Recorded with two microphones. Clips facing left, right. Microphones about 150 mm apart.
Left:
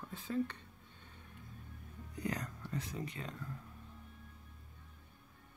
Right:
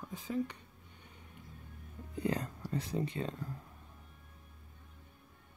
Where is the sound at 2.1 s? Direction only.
30° right (ahead or behind).